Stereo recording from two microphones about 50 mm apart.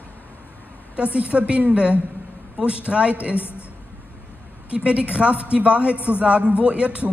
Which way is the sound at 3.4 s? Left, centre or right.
Left.